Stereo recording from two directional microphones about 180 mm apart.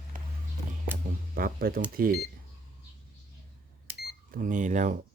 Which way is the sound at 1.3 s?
55° right (ahead or behind).